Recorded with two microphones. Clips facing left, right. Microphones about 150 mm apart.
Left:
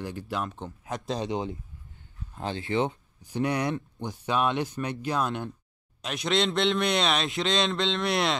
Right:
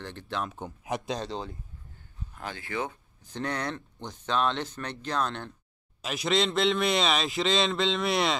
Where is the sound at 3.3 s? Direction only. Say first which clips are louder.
Left 5 dB; 10° left (ahead or behind).